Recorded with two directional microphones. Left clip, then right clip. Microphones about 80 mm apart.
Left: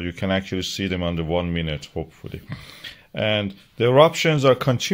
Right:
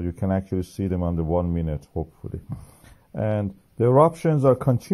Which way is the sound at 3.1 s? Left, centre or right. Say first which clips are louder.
Left 4 dB; centre.